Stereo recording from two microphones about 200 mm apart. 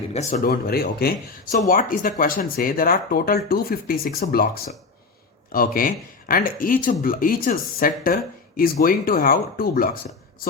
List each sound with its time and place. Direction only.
0.1 s speech: 35° left (ahead or behind)
5.5 s speech: 45° left (ahead or behind)